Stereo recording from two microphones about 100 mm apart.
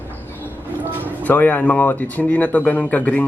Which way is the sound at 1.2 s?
15° left (ahead or behind).